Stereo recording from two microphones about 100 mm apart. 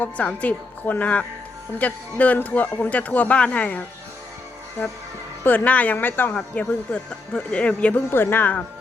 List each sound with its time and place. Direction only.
0.0 s speech: 15° left (ahead or behind)
5.4 s speech: 20° left (ahead or behind)